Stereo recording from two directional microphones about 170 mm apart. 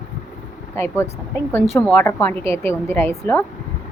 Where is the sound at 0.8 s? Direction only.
15° left (ahead or behind).